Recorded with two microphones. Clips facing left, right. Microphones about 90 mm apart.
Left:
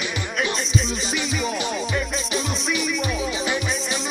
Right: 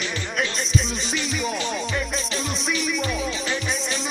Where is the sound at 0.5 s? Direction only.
Centre (ahead or behind).